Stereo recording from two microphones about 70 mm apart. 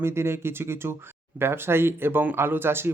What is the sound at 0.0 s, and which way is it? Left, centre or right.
Speech, right.